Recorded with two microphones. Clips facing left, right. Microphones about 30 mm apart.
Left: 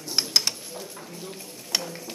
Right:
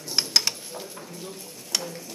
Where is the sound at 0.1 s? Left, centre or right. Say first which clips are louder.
Right 1 dB; centre.